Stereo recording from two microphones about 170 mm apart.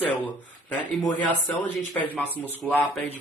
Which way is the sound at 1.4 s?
10° left (ahead or behind).